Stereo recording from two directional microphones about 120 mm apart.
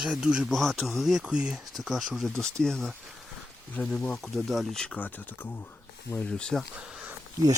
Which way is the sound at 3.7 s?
10° left (ahead or behind).